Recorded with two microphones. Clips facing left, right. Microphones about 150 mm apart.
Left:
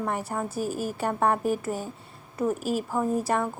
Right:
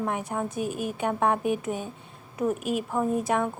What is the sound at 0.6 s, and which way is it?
Speech, 35° left (ahead or behind).